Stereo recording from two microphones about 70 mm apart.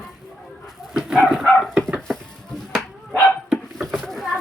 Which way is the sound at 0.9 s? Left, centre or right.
Centre.